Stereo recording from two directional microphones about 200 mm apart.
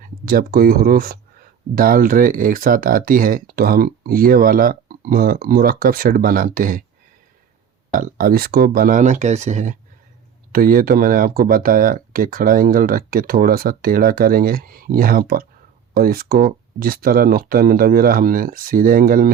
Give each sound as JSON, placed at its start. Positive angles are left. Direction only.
{"t": 0.0, "sound": "speech", "side_deg": -45}
{"t": 7.9, "sound": "speech", "side_deg": -45}